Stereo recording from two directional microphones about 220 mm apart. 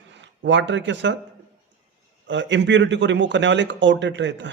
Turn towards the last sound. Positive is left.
turn(degrees=-55)  # may be behind; listen again after turning